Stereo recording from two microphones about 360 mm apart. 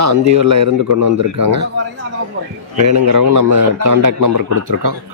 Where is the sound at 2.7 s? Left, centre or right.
Right.